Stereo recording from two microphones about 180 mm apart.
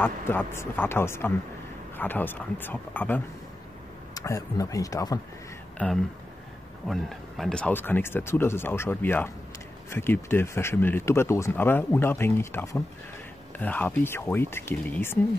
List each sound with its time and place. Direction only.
0.0 s speech: 10° left (ahead or behind)
5.8 s speech: 5° left (ahead or behind)